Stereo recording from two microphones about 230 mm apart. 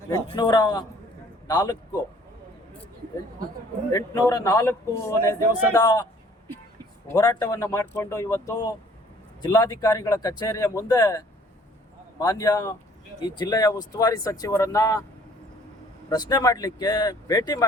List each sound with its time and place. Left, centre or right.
0.1 s speech: centre
3.9 s speech: centre
7.1 s speech: centre
12.2 s speech: centre
16.0 s speech: centre